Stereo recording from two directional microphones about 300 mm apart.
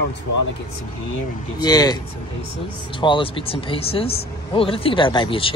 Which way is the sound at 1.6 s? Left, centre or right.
Centre.